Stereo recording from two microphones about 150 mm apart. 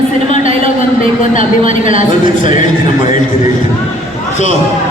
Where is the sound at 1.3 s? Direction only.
60° left (ahead or behind).